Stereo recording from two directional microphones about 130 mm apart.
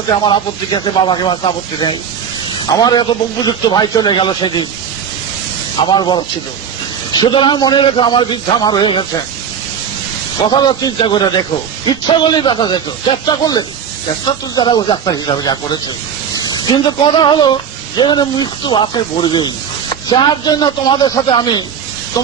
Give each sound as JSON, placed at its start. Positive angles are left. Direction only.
{"t": 0.2, "sound": "speech", "side_deg": 35}
{"t": 5.8, "sound": "speech", "side_deg": 35}
{"t": 10.5, "sound": "speech", "side_deg": 35}